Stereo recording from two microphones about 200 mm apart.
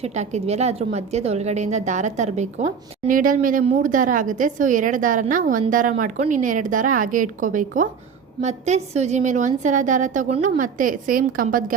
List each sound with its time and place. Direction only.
0.0 s a woman's voice: 35° right (ahead or behind)